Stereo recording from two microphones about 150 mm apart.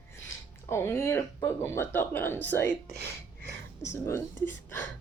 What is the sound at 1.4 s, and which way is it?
Speech, 15° left (ahead or behind).